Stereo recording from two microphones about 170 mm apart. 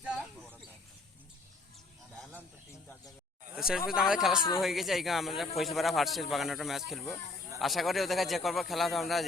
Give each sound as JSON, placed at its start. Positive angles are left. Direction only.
{"t": 0.0, "sound": "a sound", "side_deg": -5}
{"t": 3.5, "sound": "speech", "side_deg": -5}
{"t": 4.4, "sound": "speech", "side_deg": 30}
{"t": 4.6, "sound": "speech", "side_deg": 0}